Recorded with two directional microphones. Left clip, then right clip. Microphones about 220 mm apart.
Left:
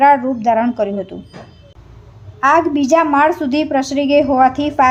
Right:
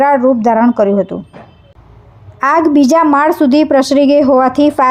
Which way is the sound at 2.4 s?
35° right (ahead or behind).